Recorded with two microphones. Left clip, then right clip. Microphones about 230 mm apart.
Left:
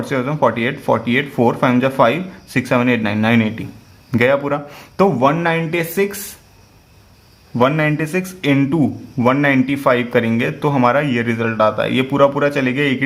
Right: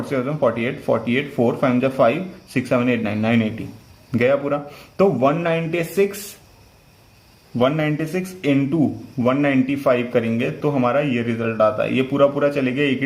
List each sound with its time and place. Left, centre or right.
0.0 s a man's voice: left
7.6 s a man's voice: left